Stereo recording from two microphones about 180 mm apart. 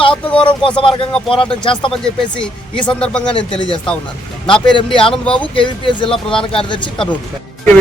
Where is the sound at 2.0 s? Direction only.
5° left (ahead or behind).